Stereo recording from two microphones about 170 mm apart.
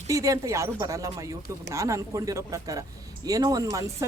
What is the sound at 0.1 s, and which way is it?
Speech, 20° right (ahead or behind).